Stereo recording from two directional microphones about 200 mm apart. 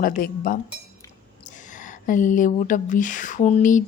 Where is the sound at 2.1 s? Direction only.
40° left (ahead or behind).